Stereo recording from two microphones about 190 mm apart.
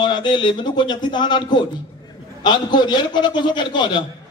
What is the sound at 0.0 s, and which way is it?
A man's voice, 25° left (ahead or behind).